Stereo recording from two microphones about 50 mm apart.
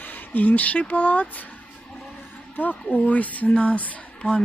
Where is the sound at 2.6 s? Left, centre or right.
Left.